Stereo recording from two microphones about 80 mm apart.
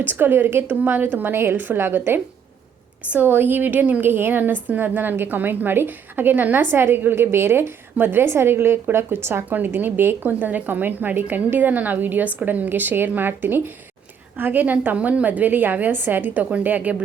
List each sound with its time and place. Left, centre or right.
0.0 s a woman's voice: right